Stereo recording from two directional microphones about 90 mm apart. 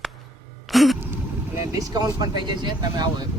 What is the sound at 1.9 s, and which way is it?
Speech, 45° right (ahead or behind).